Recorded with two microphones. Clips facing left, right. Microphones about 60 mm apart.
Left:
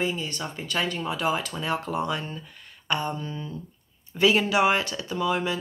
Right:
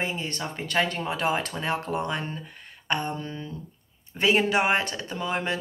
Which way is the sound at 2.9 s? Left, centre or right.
Right.